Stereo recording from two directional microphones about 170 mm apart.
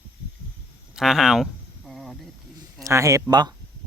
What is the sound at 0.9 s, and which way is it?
Speech, centre (ahead or behind).